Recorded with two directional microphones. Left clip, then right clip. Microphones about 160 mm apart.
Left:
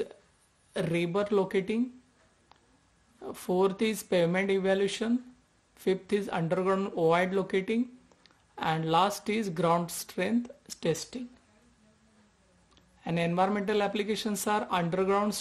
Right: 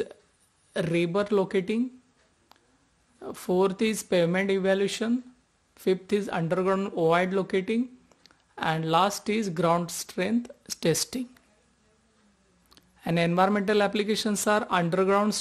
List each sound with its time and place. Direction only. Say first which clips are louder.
0.7 s speech: right 3 dB; 25° right (ahead or behind)
3.2 s speech: right 3 dB; 20° right (ahead or behind); by 11.2 s 35° right (ahead or behind)
12.6 s speech: right 5 dB; 35° right (ahead or behind)